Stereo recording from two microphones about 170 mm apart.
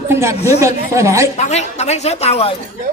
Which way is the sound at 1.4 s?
40° left (ahead or behind).